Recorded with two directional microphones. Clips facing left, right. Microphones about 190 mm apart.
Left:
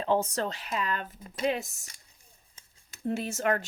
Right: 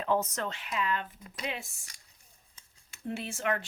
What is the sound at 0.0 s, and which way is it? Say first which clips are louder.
Speech: left 3 dB; 30° left (ahead or behind).